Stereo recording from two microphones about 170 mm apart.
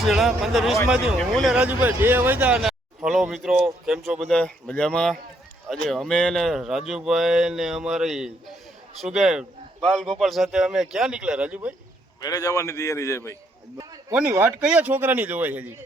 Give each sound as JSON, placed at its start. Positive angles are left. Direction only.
{"t": 0.0, "sound": "speech", "side_deg": 0}
{"t": 12.2, "sound": "a man's voice", "side_deg": 20}
{"t": 14.3, "sound": "speech", "side_deg": -10}